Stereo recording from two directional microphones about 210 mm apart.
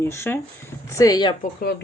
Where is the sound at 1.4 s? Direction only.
50° left (ahead or behind).